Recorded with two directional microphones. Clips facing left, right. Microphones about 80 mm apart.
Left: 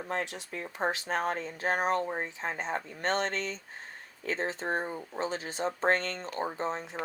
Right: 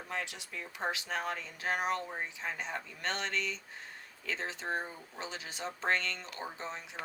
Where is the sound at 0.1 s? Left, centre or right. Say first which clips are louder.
Left 5 dB; left.